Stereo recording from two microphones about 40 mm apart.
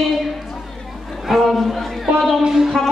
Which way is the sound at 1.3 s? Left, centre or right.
Centre.